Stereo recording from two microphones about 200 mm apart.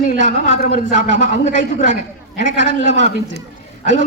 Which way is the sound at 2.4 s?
65° right (ahead or behind).